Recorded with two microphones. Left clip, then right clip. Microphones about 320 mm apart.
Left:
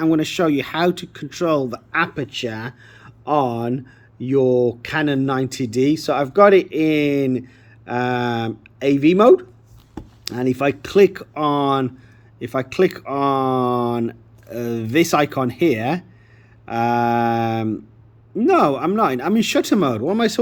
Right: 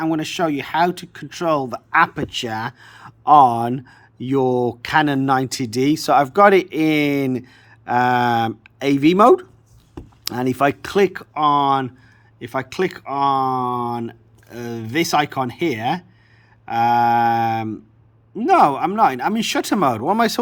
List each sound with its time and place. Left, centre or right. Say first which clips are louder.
0.0 s speech: left 2 dB; centre